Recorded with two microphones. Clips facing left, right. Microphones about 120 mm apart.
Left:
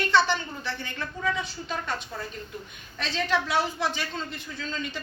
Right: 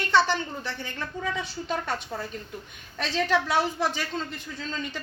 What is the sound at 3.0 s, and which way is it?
A woman's voice, 45° right (ahead or behind).